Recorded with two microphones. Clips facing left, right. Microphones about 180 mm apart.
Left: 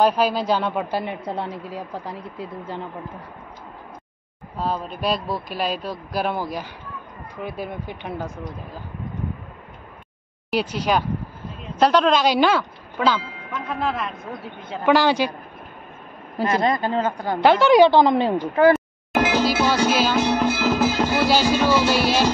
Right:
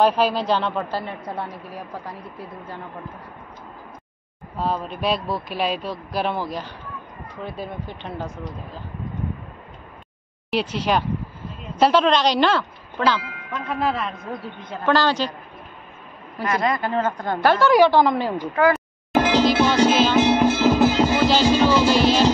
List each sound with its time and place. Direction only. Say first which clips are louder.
0.0 s speech: even; centre (ahead or behind)
4.6 s speech: right 1 dB; centre (ahead or behind)
10.5 s speech: even; centre (ahead or behind)
14.9 s speech: left 2 dB; 10° left (ahead or behind)
16.3 s a woman's voice: left 2 dB; 30° left (ahead or behind)
19.1 s music: right 2 dB; 5° left (ahead or behind)